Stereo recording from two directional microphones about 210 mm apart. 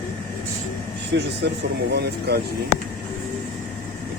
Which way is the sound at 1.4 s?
50° right (ahead or behind).